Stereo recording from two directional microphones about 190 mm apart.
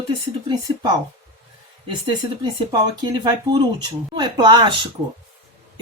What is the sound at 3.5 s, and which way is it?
Speech, 25° right (ahead or behind).